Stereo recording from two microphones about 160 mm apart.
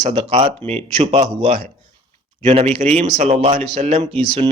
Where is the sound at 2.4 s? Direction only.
40° right (ahead or behind).